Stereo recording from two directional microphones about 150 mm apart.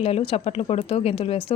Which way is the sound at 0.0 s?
40° left (ahead or behind).